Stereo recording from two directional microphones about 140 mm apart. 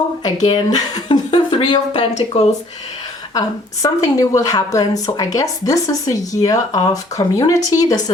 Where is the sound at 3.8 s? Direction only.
25° left (ahead or behind).